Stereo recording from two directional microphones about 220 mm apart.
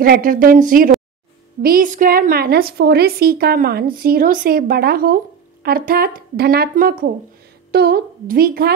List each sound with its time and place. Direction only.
0.0 s a woman's voice: 40° right (ahead or behind)